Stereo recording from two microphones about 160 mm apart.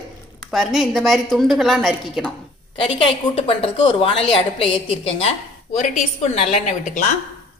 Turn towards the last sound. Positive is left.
turn(degrees=50)  # may be behind; listen again after turning